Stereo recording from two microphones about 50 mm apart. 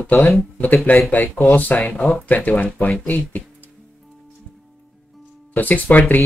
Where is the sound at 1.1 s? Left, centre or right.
Left.